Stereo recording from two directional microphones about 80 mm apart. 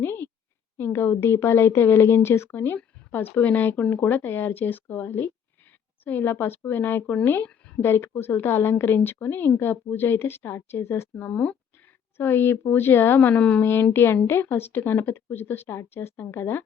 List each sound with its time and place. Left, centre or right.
0.0 s a sound: left
0.9 s speech: left
11.3 s speech: centre
12.1 s speech: left
13.6 s speech: left